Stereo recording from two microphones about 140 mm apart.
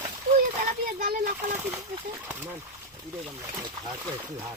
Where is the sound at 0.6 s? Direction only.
90° right.